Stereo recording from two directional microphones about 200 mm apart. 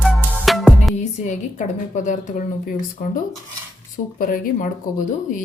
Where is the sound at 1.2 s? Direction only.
35° left (ahead or behind).